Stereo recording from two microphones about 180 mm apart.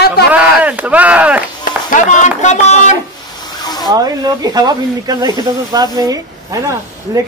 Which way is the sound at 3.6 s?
20° left (ahead or behind).